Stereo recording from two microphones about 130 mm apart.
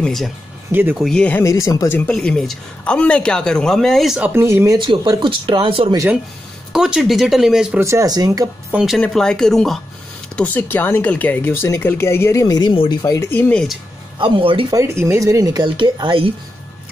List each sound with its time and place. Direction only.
0.0 s speech: centre (ahead or behind)
0.7 s speech: 15° right (ahead or behind)
0.9 s speech: centre (ahead or behind)
1.2 s speech: 20° left (ahead or behind)
2.0 s speech: 5° left (ahead or behind)
4.3 s speech: 15° right (ahead or behind)
4.7 s speech: 40° right (ahead or behind)
6.7 s speech: 5° right (ahead or behind)
7.8 s speech: 25° right (ahead or behind)
8.7 s speech: 5° right (ahead or behind); by 13.6 s 15° left (ahead or behind)
14.1 s speech: 40° right (ahead or behind)
14.7 s speech: 20° right (ahead or behind); by 16.3 s 40° right (ahead or behind)